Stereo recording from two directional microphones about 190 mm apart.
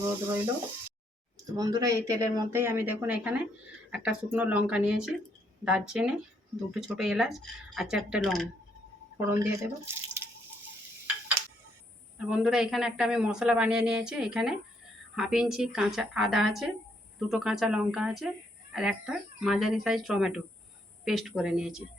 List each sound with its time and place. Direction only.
1.5 s a man's voice: 20° right (ahead or behind); by 8.4 s centre (ahead or behind)
9.1 s speech: 10° right (ahead or behind)
12.1 s a man's voice: 5° right (ahead or behind)